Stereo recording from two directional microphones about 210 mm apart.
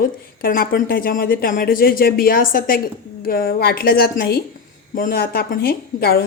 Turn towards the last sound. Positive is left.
turn(degrees=45)  # may be behind; listen again after turning